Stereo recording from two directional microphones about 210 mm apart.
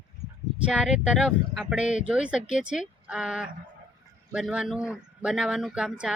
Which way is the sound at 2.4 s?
35° left (ahead or behind).